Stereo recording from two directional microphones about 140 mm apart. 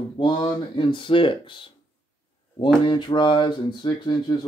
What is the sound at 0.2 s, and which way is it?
Speech, 35° left (ahead or behind).